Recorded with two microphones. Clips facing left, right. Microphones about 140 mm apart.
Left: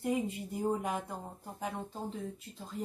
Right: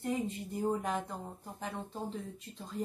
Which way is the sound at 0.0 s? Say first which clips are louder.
Left 2 dB; 5° left (ahead or behind).